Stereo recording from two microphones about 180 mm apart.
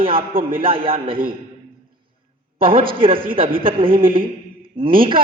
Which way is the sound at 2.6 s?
30° right (ahead or behind).